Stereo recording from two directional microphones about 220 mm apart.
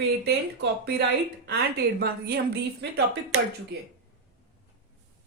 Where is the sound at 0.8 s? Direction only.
45° right (ahead or behind).